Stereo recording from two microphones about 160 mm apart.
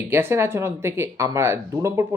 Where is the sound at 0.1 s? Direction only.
15° right (ahead or behind).